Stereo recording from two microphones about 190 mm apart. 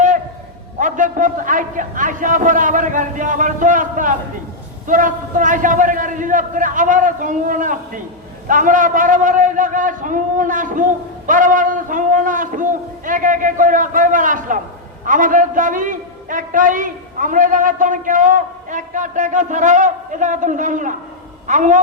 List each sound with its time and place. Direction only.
0.8 s a man's voice: 40° right (ahead or behind)